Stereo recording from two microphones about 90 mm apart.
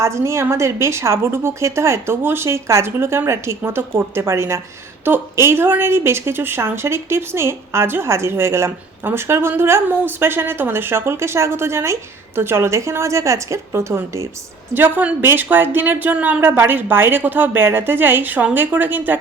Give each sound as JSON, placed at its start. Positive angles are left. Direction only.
{"t": 0.0, "sound": "a woman's voice", "side_deg": -30}
{"t": 14.7, "sound": "a woman's voice", "side_deg": -20}